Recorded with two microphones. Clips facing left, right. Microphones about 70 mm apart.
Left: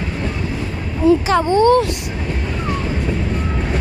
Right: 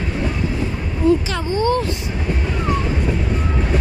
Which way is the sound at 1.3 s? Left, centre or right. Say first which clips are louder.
Left 7 dB; left.